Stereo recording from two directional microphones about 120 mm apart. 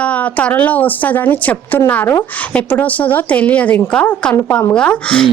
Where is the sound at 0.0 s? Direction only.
10° left (ahead or behind).